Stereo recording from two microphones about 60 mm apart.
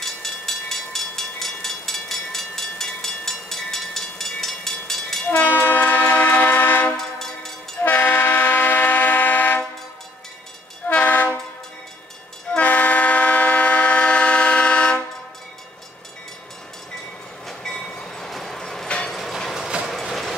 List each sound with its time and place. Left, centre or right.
0.0 s vehicle: centre
5.4 s train: left
7.0 s train: centre
7.8 s train: left
10.9 s train: left
12.5 s train: left
17.5 s train: centre
19.0 s a sound: centre
19.9 s train: centre